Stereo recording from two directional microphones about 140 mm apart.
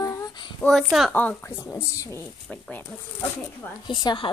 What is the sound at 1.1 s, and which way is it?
A child's voice, 15° left (ahead or behind).